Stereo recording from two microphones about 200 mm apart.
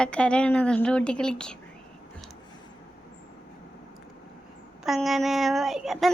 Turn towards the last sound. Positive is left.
turn(degrees=0)  # may be behind; listen again after turning